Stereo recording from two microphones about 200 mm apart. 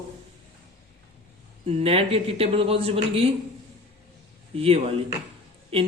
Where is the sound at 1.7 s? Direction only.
30° right (ahead or behind).